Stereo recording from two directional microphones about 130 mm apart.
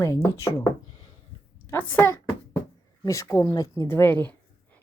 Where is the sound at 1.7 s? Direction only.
15° left (ahead or behind).